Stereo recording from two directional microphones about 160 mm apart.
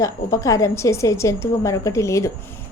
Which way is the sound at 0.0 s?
20° left (ahead or behind).